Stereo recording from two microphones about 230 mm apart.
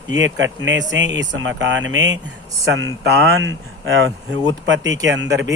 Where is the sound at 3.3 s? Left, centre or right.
Right.